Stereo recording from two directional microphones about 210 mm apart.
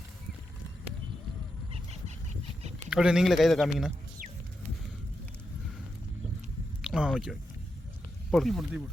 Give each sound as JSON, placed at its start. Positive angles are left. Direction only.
{"t": 1.7, "sound": "dog", "side_deg": -30}
{"t": 2.9, "sound": "speech", "side_deg": -5}
{"t": 6.8, "sound": "a sound", "side_deg": -5}
{"t": 8.3, "sound": "speech", "side_deg": 0}